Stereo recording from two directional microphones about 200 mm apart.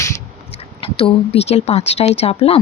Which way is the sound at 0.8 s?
30° left (ahead or behind).